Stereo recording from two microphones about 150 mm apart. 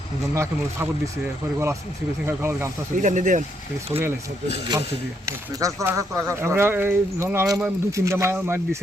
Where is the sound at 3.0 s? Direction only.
55° right (ahead or behind).